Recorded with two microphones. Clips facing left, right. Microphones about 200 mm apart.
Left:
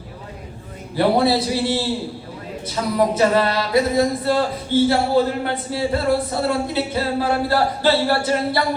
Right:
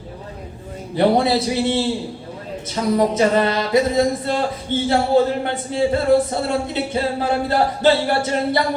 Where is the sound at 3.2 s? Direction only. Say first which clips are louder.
Right 1 dB; 20° right (ahead or behind).